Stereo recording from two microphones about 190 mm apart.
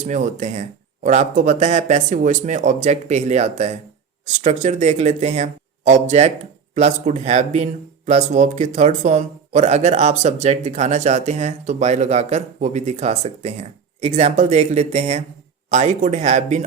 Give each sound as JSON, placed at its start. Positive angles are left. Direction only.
{"t": 0.0, "sound": "speech", "side_deg": -40}